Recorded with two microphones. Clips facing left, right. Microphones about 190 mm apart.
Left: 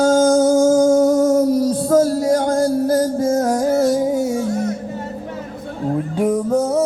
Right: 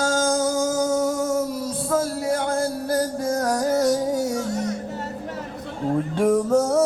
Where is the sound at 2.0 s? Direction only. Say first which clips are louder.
Left 8 dB; 30° left (ahead or behind).